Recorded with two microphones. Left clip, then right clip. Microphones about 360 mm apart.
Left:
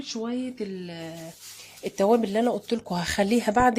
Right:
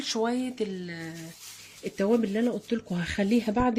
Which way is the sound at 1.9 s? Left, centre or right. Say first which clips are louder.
Left 5 dB; centre.